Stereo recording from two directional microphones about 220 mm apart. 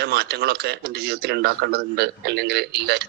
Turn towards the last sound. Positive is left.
turn(degrees=-50)  # may be behind; listen again after turning